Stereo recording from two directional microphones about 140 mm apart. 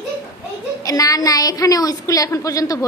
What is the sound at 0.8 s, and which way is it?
A woman's voice, 25° left (ahead or behind).